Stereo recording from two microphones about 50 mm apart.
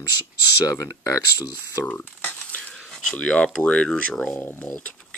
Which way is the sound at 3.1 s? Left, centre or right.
Left.